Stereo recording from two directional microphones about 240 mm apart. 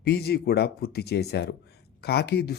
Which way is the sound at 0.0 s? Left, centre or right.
Left.